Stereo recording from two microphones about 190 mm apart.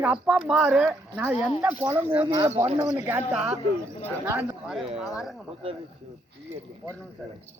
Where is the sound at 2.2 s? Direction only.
30° right (ahead or behind).